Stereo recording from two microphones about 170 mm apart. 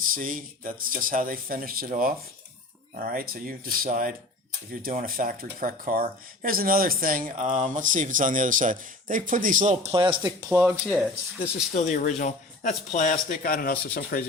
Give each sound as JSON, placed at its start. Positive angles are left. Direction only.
{"t": 0.0, "sound": "speech", "side_deg": -55}
{"t": 9.9, "sound": "speech", "side_deg": -30}
{"t": 10.2, "sound": "speech", "side_deg": -15}
{"t": 11.7, "sound": "speech", "side_deg": 45}